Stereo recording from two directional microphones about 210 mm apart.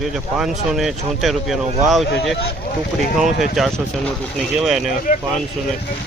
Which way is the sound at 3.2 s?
Centre (ahead or behind).